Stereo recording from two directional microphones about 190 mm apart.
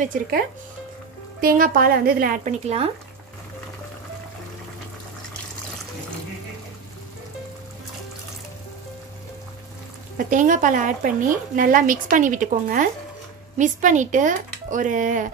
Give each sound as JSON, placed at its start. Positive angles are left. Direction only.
{"t": 1.4, "sound": "a woman's voice", "side_deg": -50}
{"t": 10.1, "sound": "a woman's voice", "side_deg": -45}